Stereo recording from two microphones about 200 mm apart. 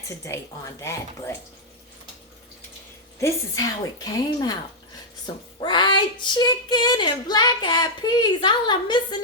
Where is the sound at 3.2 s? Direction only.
20° left (ahead or behind).